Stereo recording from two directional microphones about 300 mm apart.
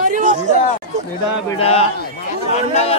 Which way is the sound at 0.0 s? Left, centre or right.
Right.